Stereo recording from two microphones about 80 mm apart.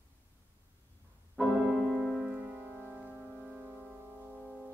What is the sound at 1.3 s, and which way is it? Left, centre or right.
Piano, centre.